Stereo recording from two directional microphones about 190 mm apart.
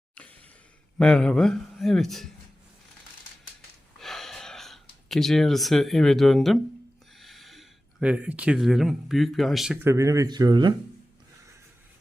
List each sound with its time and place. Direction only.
0.9 s speech: 5° left (ahead or behind)
4.0 s a sound: centre (ahead or behind)
7.2 s speech: centre (ahead or behind)
9.8 s speech: 15° right (ahead or behind)